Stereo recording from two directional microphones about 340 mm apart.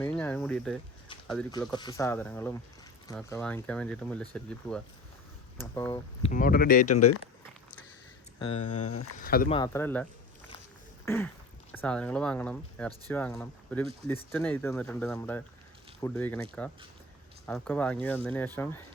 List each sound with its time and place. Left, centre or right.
0.0 s speech: centre; by 6.9 s left
8.5 s speech: left
9.2 s speech: left
9.6 s speech: centre
11.0 s a sound: centre
11.7 s speech: centre